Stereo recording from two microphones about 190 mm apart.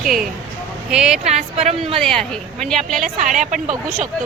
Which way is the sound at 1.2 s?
35° right (ahead or behind).